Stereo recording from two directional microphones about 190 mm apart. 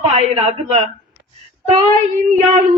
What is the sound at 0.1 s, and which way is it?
Female singing, 35° right (ahead or behind).